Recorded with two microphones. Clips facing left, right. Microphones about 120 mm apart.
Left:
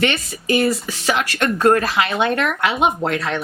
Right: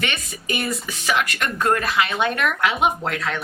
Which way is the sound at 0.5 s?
30° left (ahead or behind).